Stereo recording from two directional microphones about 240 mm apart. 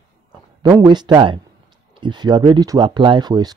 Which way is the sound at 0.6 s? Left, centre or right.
Centre.